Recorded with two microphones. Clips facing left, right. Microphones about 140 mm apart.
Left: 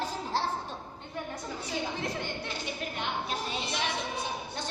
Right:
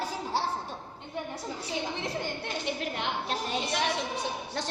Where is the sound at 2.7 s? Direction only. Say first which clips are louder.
Right 4 dB; 70° right (ahead or behind).